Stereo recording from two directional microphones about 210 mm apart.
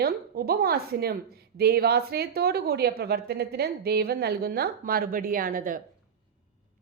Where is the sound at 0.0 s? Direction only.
45° right (ahead or behind).